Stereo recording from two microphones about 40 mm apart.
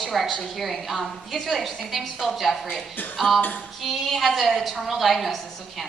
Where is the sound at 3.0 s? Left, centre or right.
Left.